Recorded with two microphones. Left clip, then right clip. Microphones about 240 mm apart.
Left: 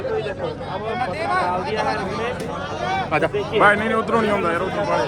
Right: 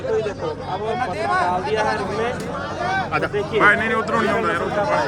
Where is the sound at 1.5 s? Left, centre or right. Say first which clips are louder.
Right 2 dB; right.